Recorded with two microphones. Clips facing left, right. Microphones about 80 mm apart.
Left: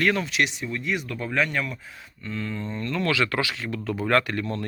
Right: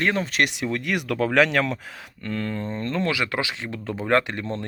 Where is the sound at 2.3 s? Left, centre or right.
Right.